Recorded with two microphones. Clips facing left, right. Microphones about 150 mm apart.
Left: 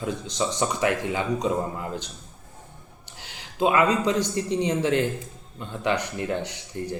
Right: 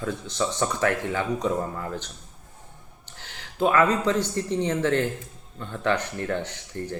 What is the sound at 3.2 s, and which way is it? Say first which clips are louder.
Speech: even; 15° left (ahead or behind).